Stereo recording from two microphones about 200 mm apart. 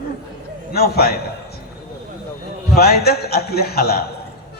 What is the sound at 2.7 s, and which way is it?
Speech, 50° left (ahead or behind).